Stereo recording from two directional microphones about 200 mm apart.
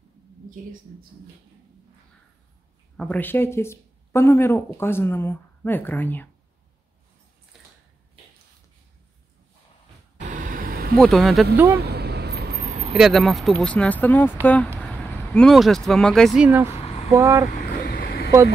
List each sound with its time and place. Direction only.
3.0 s speech: 5° left (ahead or behind)
7.5 s a sound: centre (ahead or behind)
10.1 s vehicle: 40° right (ahead or behind)
11.0 s speech: centre (ahead or behind)
11.5 s speech: 10° right (ahead or behind)
11.8 s vehicle: 55° right (ahead or behind)
12.9 s speech: centre (ahead or behind)
17.5 s vehicle: 40° left (ahead or behind)